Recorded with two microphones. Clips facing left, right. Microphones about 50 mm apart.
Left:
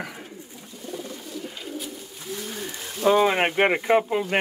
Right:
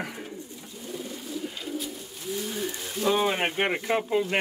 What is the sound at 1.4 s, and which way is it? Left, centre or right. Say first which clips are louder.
Bird: right 1 dB; centre.